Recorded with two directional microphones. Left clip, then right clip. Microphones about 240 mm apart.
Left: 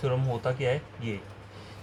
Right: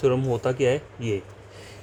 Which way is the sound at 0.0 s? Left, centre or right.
Right.